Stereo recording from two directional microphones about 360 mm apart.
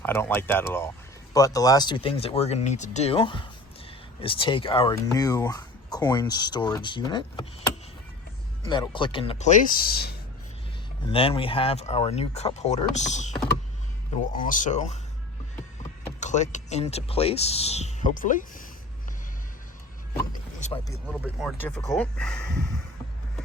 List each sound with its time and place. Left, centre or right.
0.0 s speech: centre
8.6 s speech: centre
11.0 s speech: centre
16.2 s speech: centre
20.1 s vehicle: centre
21.1 s speech: centre